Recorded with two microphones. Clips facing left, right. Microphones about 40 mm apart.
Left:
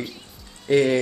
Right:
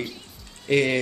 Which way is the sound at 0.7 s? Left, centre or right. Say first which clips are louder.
Left 3 dB; right.